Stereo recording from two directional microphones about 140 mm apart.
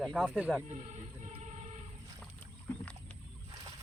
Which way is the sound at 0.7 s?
60° right (ahead or behind).